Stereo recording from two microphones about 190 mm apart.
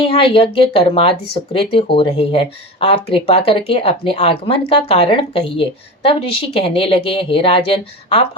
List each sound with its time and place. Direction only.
0.0 s speech: 30° left (ahead or behind)